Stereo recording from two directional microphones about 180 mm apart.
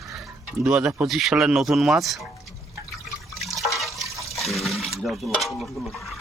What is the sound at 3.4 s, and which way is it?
Toilet flush, centre (ahead or behind).